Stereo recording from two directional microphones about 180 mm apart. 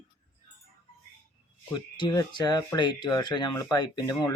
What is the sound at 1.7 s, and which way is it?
Speech, 25° left (ahead or behind).